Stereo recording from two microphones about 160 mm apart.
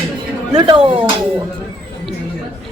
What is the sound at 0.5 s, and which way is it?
Speech, 30° right (ahead or behind).